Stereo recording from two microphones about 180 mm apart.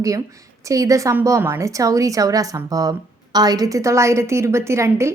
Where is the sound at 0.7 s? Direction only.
20° right (ahead or behind).